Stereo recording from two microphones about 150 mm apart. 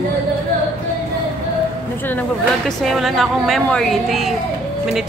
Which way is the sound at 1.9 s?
15° left (ahead or behind).